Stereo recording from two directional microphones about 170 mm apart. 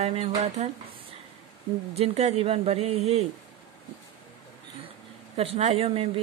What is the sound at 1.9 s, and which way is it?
Speech, 40° right (ahead or behind).